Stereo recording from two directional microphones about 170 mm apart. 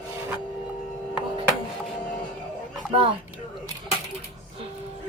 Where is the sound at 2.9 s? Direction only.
30° right (ahead or behind).